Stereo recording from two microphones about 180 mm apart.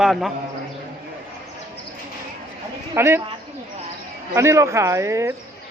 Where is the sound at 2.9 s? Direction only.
15° right (ahead or behind).